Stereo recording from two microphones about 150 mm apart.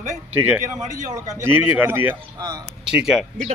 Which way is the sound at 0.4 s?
15° right (ahead or behind).